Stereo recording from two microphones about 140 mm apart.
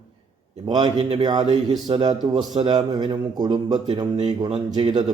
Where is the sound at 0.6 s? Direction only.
35° right (ahead or behind).